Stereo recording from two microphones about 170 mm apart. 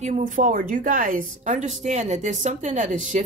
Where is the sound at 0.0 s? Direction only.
50° right (ahead or behind).